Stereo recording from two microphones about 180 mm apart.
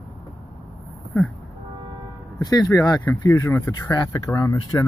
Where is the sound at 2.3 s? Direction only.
20° left (ahead or behind).